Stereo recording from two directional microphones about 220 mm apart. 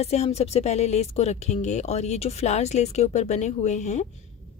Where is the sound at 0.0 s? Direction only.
30° left (ahead or behind).